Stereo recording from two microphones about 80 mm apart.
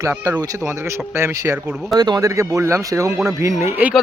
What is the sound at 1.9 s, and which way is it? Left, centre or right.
Speech, right.